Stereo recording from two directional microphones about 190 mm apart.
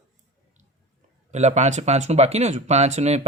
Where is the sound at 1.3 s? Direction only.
35° right (ahead or behind).